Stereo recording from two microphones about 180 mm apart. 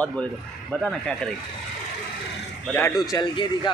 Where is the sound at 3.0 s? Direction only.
20° left (ahead or behind).